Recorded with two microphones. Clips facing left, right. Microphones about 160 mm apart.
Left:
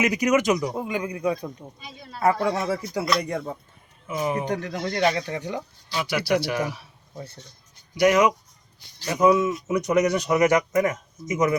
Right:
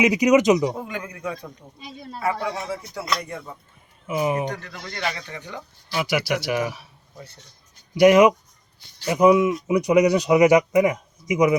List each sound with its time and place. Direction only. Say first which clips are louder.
0.0 s speech: right 4 dB; 15° right (ahead or behind)
0.9 s a man's voice: left 5 dB; 15° left (ahead or behind)
2.1 s speech: left 4 dB; 45° left (ahead or behind)
2.6 s speech: left 5 dB; 80° left
4.0 s speech: right 3 dB; 10° right (ahead or behind)
4.6 s speech: left 7 dB; 40° left (ahead or behind)
5.9 s speech: even; 5° right (ahead or behind)
9.0 s speech: right 3 dB; 15° right (ahead or behind)